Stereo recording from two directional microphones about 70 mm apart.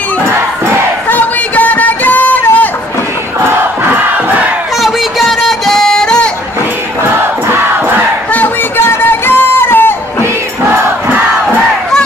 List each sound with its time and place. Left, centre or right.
1.0 s a sound: left
5.5 s music: centre
8.7 s music: left